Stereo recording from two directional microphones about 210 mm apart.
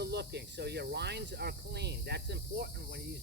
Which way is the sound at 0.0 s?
50° right (ahead or behind).